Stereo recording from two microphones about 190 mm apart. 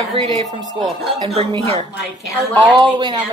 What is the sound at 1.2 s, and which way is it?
Speech, 30° right (ahead or behind).